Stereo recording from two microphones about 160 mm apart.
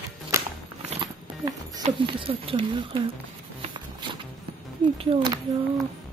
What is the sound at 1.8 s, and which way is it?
Speech, 35° right (ahead or behind).